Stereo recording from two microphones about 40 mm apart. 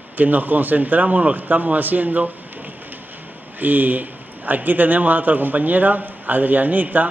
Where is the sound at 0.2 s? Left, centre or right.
Right.